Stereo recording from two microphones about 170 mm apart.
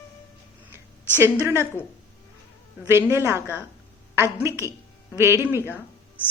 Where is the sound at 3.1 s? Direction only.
15° right (ahead or behind).